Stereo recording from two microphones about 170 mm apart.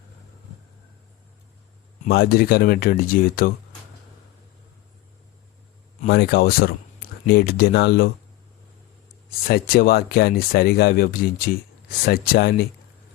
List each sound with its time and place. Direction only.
2.0 s speech: 70° left (ahead or behind)
6.1 s speech: 70° left (ahead or behind)
9.5 s speech: 60° left (ahead or behind)